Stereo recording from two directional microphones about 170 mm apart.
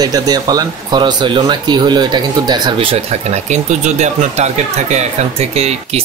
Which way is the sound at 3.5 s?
45° right (ahead or behind).